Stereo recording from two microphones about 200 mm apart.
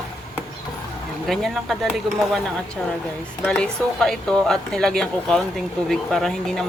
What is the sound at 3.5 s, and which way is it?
Speech, 5° left (ahead or behind).